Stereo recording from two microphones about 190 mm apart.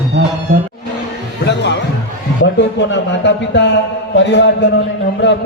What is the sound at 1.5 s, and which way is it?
Music, 65° left (ahead or behind).